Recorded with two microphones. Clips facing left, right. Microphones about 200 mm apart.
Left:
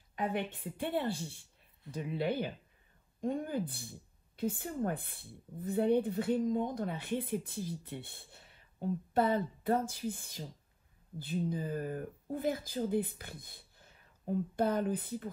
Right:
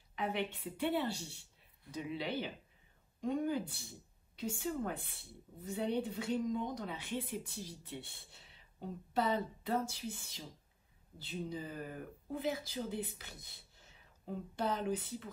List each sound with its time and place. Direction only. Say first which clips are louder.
0.1 s a woman's voice: left 2 dB; 50° left (ahead or behind)